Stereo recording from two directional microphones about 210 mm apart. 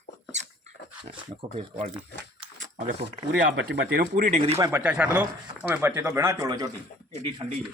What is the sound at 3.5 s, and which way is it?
Speech, 60° right (ahead or behind).